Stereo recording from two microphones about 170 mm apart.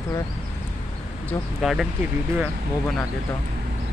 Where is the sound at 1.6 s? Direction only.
Centre (ahead or behind).